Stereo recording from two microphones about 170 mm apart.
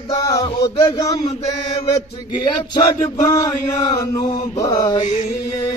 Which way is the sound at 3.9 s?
20° left (ahead or behind).